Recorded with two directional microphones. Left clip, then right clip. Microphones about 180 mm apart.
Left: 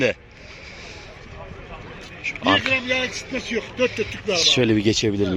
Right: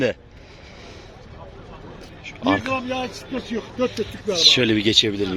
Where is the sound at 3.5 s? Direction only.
45° right (ahead or behind).